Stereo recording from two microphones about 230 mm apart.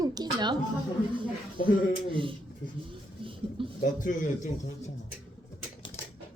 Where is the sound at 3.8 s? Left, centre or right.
Left.